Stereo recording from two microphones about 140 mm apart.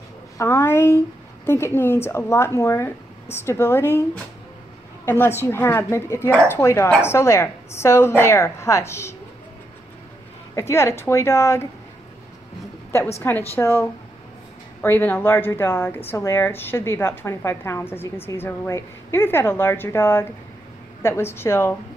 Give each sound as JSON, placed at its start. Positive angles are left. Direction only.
{"t": 0.4, "sound": "a woman's voice", "side_deg": 15}
{"t": 10.5, "sound": "a woman's voice", "side_deg": 20}
{"t": 13.2, "sound": "speech", "side_deg": 15}